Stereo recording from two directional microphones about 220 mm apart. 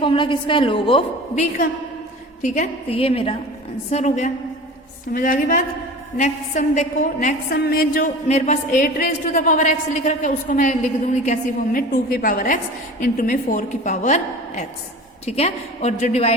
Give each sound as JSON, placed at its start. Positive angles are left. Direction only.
{"t": 0.0, "sound": "a woman's voice", "side_deg": 20}